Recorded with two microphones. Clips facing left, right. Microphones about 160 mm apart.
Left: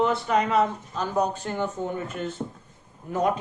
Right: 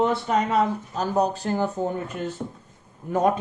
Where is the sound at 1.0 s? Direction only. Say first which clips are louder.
Right 2 dB; 40° right (ahead or behind).